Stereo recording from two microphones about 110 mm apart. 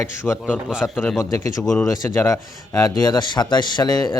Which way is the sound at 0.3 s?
15° left (ahead or behind).